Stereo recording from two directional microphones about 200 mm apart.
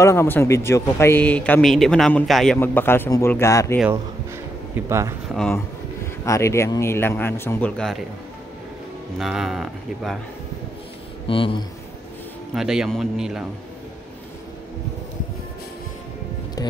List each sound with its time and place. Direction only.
0.0 s speech: 15° left (ahead or behind)
4.7 s a man's voice: 15° right (ahead or behind)
5.3 s speech: centre (ahead or behind)
6.2 s speech: 15° left (ahead or behind)
9.2 s speech: centre (ahead or behind)
11.2 s speech: 25° left (ahead or behind)
12.5 s speech: centre (ahead or behind)